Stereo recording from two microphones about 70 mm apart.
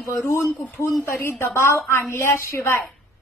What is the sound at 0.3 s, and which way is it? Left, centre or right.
A woman's voice, left.